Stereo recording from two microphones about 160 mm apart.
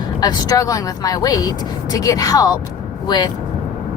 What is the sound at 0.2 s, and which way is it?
Speech, 25° left (ahead or behind).